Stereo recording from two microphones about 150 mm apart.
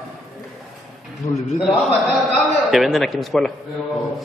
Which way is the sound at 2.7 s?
Centre (ahead or behind).